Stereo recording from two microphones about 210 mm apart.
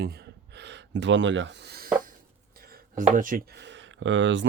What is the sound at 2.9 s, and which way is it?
Speech, 40° right (ahead or behind).